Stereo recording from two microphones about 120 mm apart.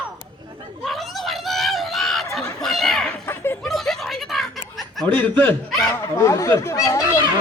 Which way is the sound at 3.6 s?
Centre (ahead or behind).